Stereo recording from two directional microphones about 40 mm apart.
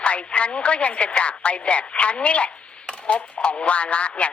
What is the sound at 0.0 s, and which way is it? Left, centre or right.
A woman's voice, left.